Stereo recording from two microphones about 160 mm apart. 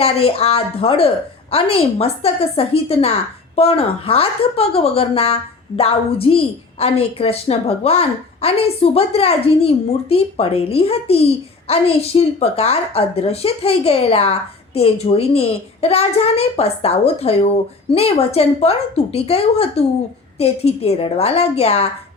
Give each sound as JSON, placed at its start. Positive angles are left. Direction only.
{"t": 0.0, "sound": "a woman's voice", "side_deg": 40}